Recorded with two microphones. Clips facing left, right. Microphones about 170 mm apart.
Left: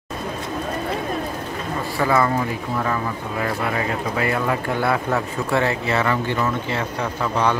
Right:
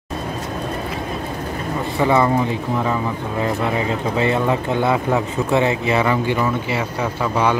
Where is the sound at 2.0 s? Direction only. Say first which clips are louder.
Right 3 dB; 20° right (ahead or behind).